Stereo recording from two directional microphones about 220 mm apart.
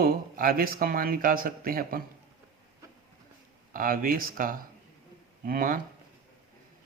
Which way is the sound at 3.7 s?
40° right (ahead or behind).